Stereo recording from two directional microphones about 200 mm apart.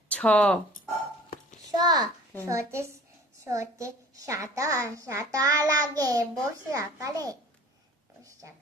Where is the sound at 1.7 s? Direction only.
20° right (ahead or behind).